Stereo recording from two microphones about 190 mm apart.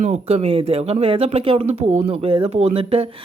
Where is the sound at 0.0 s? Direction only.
35° right (ahead or behind).